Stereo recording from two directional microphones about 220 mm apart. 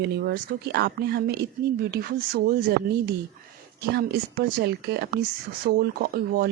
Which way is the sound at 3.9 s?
50° right (ahead or behind).